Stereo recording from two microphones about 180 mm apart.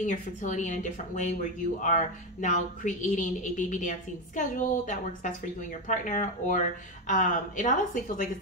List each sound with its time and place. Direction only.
0.0 s a woman's voice: 45° left (ahead or behind)